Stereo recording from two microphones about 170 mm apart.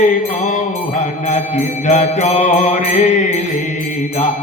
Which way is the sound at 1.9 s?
45° left (ahead or behind).